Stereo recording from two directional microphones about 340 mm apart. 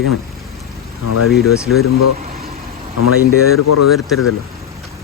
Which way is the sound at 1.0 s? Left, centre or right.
Left.